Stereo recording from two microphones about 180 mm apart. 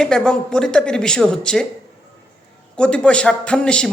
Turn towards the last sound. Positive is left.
turn(degrees=5)  # may be behind; listen again after turning